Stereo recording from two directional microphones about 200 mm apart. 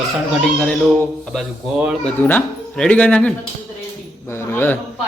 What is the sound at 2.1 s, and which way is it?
A man's voice, 10° left (ahead or behind).